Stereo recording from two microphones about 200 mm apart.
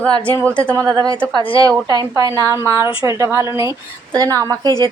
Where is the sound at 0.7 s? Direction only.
20° right (ahead or behind).